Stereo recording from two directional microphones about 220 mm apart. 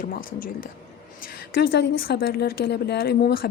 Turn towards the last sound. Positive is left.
turn(degrees=45)  # may be behind; listen again after turning